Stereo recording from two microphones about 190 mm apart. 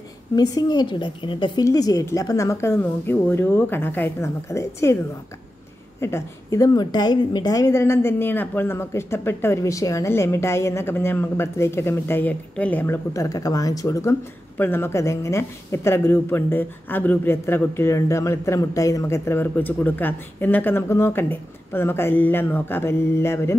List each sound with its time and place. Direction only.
0.4 s a woman's voice: 20° left (ahead or behind)
5.9 s a woman's voice: 15° left (ahead or behind)